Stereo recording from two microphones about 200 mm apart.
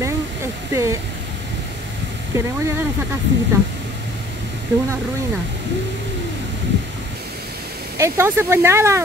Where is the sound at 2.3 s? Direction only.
15° right (ahead or behind).